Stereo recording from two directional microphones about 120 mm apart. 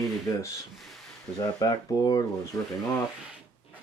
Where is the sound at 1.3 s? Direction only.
30° left (ahead or behind).